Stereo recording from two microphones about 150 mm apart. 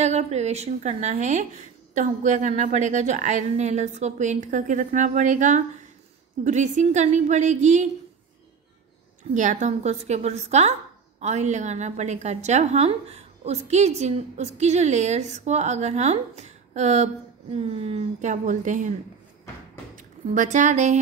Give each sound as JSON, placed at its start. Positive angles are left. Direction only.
{"t": 0.0, "sound": "a woman's voice", "side_deg": -45}
{"t": 9.3, "sound": "a woman's voice", "side_deg": -55}
{"t": 20.0, "sound": "speech", "side_deg": -55}